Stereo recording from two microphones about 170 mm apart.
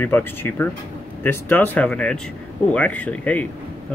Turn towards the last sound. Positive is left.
turn(degrees=10)  # may be behind; listen again after turning